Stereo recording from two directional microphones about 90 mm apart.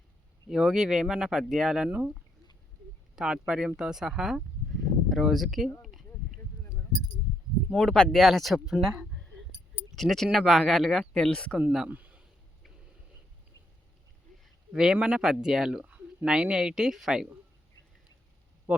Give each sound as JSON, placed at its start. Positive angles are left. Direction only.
{"t": 0.5, "sound": "speech", "side_deg": -5}
{"t": 3.2, "sound": "speech", "side_deg": -5}
{"t": 5.8, "sound": "a sound", "side_deg": 0}
{"t": 7.7, "sound": "speech", "side_deg": 0}
{"t": 9.9, "sound": "speech", "side_deg": 0}
{"t": 11.6, "sound": "speech", "side_deg": -5}
{"t": 11.9, "sound": "a sound", "side_deg": -15}
{"t": 14.7, "sound": "speech", "side_deg": -5}